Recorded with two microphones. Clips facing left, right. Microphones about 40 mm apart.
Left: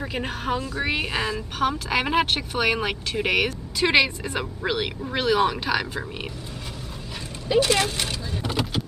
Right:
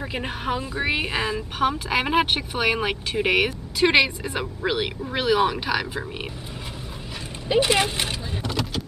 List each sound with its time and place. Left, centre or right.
0.0 s a woman's voice: centre
7.4 s speech: centre
8.4 s vehicle: centre